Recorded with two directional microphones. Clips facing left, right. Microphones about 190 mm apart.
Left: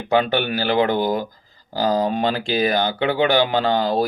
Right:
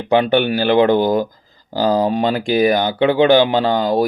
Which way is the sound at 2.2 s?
15° right (ahead or behind).